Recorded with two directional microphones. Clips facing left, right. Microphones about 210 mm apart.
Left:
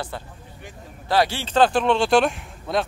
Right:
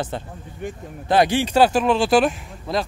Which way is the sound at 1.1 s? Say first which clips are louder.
Right 4 dB; 20° right (ahead or behind).